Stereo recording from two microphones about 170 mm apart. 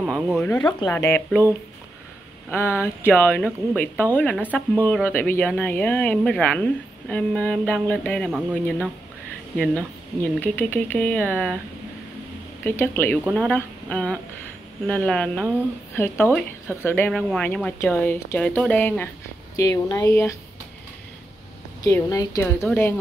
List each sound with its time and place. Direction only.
0.0 s speech: centre (ahead or behind)
2.5 s speech: 15° left (ahead or behind)
8.3 s speech: 10° right (ahead or behind)
9.6 s speech: 10° left (ahead or behind)
12.6 s speech: 15° left (ahead or behind)
21.8 s a woman's voice: 20° left (ahead or behind)